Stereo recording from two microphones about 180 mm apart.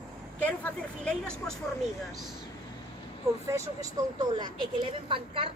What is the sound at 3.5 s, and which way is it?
A woman's voice, 15° right (ahead or behind).